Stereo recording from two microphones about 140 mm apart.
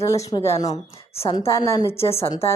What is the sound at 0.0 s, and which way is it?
A woman's voice, 25° left (ahead or behind).